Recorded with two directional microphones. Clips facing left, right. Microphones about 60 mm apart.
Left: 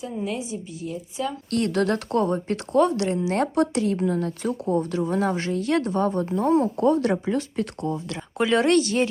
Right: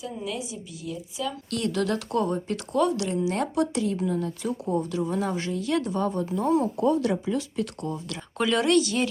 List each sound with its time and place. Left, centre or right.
0.0 s a woman's voice: left
8.6 s a woman's voice: left